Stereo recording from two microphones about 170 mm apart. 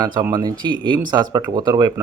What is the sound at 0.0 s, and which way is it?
A man's voice, 25° right (ahead or behind).